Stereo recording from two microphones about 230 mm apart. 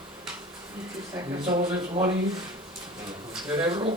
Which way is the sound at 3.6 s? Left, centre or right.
Right.